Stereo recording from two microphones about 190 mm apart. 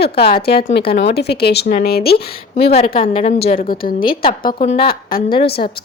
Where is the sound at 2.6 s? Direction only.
30° left (ahead or behind).